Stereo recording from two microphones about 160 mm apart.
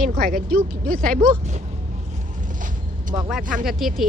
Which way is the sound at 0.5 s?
60° right (ahead or behind).